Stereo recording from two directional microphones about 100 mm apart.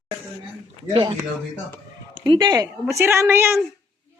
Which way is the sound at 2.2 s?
50° right (ahead or behind).